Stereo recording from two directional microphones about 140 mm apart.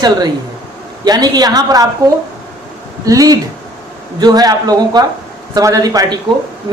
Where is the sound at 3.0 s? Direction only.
25° right (ahead or behind).